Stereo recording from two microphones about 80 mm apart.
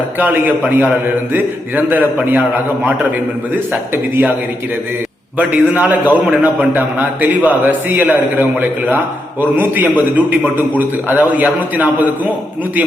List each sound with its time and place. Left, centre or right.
0.2 s a man's voice: right
3.9 s a man's voice: right
5.4 s a man's voice: centre